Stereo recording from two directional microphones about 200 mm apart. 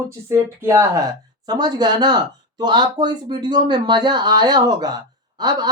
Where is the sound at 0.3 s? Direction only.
15° right (ahead or behind).